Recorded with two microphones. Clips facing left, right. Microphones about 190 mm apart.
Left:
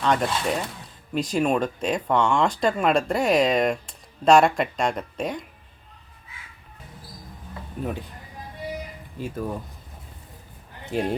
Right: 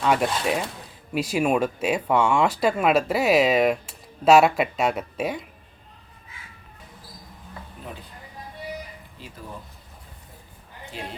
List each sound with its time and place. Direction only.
0.0 s speech: 10° right (ahead or behind)
9.2 s speech: 50° left (ahead or behind)
10.9 s speech: 50° left (ahead or behind)